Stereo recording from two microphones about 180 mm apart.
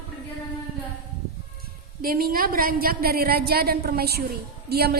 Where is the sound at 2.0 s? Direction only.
55° right (ahead or behind).